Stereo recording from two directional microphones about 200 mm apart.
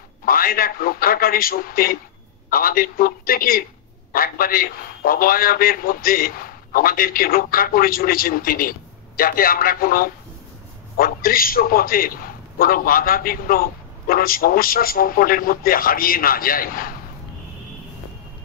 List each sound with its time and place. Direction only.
0.2 s a man's voice: 45° left (ahead or behind)